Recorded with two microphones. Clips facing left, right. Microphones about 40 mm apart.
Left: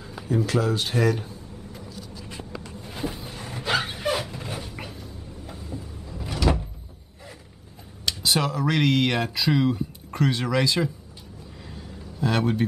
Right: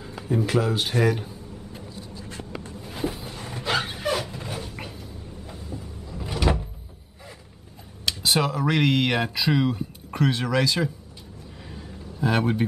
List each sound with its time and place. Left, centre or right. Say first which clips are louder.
0.0 s speech: even; centre
1.9 s vehicle: even; right
2.8 s a sound: right 2 dB; centre
5.7 s vehicle: left 1 dB; centre
6.1 s door: even; centre
8.0 s speech: right 1 dB; centre
12.2 s speech: right 1 dB; centre